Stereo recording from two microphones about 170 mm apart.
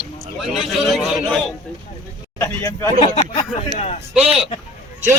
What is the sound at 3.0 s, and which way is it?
Speech, 40° left (ahead or behind).